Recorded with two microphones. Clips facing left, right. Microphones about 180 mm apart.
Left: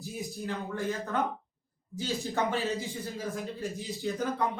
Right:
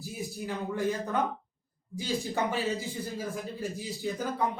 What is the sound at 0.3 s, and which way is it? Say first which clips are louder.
Speech: right 3 dB; 15° right (ahead or behind).